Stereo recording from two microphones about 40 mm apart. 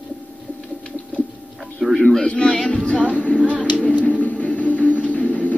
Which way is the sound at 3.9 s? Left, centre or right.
Right.